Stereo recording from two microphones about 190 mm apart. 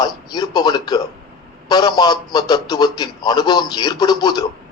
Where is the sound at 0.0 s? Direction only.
20° left (ahead or behind).